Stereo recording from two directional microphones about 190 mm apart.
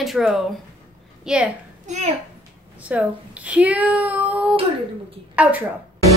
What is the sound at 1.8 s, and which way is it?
Speech, 40° right (ahead or behind).